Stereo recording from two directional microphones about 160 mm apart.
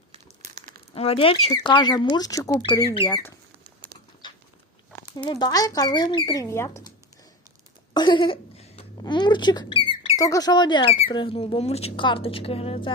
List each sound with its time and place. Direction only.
0.1 s crumpling: 45° right (ahead or behind)
0.9 s speech: 35° left (ahead or behind)
4.2 s a sound: 30° left (ahead or behind)
4.9 s speech: 20° left (ahead or behind)
7.9 s a sound: 30° left (ahead or behind)
10.2 s a woman's voice: 20° left (ahead or behind); by 12.9 s 35° left (ahead or behind)